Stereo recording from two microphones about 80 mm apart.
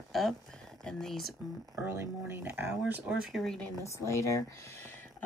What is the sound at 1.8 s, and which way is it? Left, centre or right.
Speech, right.